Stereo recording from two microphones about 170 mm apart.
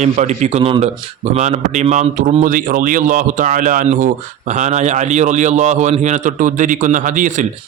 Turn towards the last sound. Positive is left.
turn(degrees=-50)  # may be behind; listen again after turning